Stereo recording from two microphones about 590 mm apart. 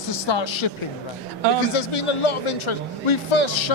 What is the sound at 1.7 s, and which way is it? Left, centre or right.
Speech, left.